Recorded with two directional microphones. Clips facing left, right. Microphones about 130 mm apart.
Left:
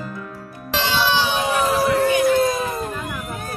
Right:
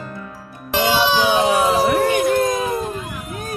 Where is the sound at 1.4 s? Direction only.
75° right (ahead or behind).